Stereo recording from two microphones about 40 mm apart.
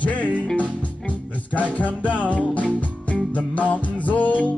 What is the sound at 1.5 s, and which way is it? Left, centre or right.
Music, left.